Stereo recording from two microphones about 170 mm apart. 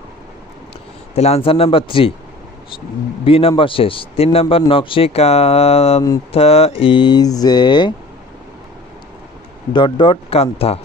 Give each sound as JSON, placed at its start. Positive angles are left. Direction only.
{"t": 1.1, "sound": "speech", "side_deg": 35}
{"t": 3.3, "sound": "speech", "side_deg": 35}
{"t": 9.7, "sound": "speech", "side_deg": 30}